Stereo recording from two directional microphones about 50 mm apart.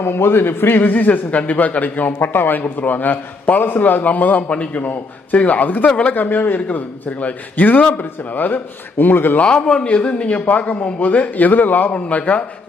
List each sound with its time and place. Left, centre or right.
0.0 s a man's voice: left
9.8 s a man's voice: left